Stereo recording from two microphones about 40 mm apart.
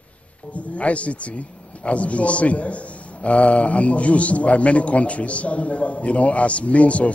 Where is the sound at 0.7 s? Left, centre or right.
Left.